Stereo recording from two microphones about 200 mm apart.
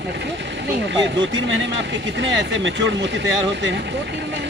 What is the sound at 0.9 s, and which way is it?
Speech, 65° right (ahead or behind).